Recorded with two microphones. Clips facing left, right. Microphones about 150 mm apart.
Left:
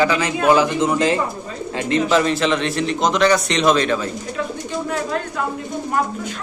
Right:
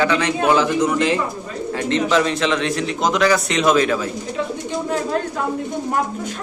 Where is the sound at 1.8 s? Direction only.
5° left (ahead or behind).